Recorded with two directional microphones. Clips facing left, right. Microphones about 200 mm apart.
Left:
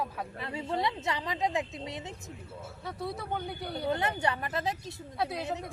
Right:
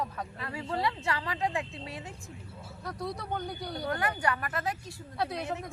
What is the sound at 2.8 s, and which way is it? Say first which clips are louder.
Speech: even; 5° left (ahead or behind).